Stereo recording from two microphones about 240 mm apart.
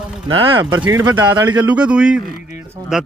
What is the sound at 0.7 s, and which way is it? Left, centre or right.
Speech, centre.